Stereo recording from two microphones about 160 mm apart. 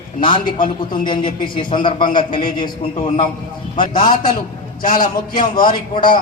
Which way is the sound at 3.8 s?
30° left (ahead or behind).